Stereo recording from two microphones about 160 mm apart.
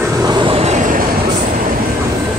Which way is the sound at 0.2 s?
30° right (ahead or behind).